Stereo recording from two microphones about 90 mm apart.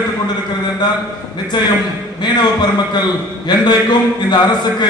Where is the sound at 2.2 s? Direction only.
55° left (ahead or behind).